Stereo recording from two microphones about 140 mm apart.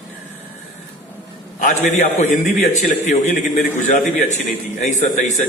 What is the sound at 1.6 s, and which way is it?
A man's voice, 65° left (ahead or behind).